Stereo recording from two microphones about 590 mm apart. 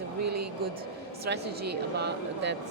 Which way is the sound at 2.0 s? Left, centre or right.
Centre.